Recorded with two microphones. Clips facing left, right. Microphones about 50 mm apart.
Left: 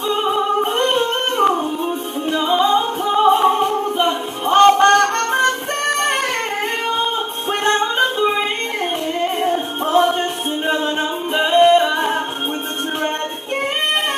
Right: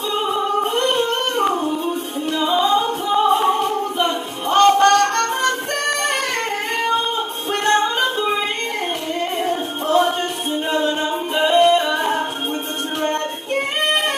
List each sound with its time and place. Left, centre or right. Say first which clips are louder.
0.1 s music: left 2 dB; centre
0.7 s singing: left 1 dB; left
1.4 s female singing: left 5 dB; centre
2.3 s music: left 1 dB; centre
7.6 s music: even; left
11.3 s singing: left 2 dB; centre